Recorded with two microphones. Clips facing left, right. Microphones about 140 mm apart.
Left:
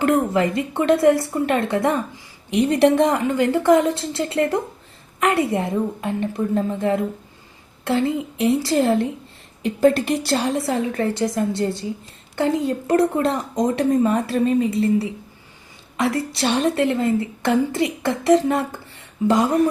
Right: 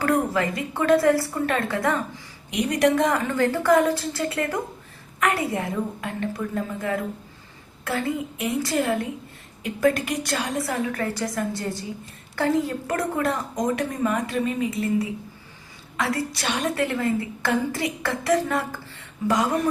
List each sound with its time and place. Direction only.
0.0 s a woman's voice: 20° left (ahead or behind)